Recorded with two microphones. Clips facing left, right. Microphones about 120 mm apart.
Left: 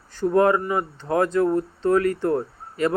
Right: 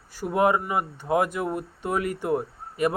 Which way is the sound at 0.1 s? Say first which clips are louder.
Left 4 dB; 10° right (ahead or behind).